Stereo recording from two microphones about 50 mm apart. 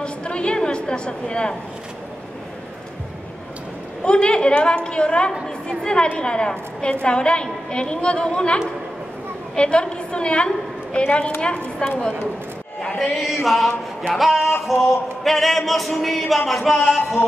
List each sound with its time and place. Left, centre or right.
0.0 s a sound: centre
4.0 s a woman's voice: left
13.0 s music: centre